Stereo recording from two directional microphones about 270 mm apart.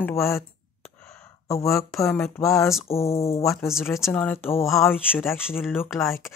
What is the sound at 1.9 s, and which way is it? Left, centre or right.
Speech, centre.